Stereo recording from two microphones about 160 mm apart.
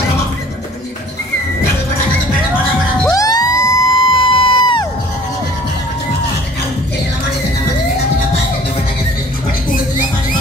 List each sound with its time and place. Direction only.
3.2 s crowd: 20° left (ahead or behind)